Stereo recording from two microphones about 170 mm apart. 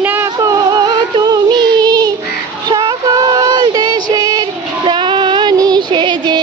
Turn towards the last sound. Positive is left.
turn(degrees=-25)  # may be behind; listen again after turning